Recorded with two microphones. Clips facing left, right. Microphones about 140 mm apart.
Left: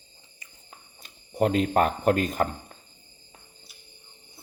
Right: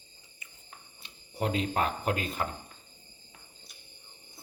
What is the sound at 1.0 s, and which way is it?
Speech, 50° left (ahead or behind).